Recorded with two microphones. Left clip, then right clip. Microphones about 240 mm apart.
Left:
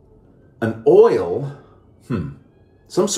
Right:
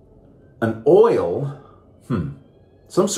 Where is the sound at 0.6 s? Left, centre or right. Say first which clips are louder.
Left 2 dB; centre.